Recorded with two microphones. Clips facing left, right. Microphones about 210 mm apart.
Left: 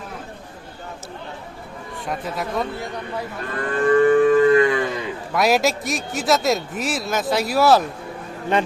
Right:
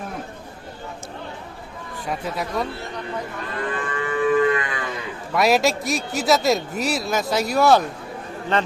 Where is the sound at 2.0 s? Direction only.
Centre (ahead or behind).